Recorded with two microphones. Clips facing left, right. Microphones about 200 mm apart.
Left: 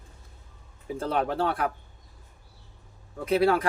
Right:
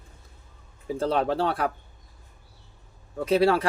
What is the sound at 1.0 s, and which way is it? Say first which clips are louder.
Speech: right 2 dB; 30° right (ahead or behind).